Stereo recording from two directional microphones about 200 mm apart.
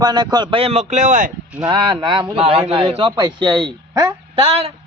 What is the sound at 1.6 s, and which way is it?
Speech, 20° right (ahead or behind).